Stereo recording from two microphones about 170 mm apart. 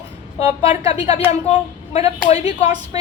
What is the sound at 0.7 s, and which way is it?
A woman's voice, 35° left (ahead or behind).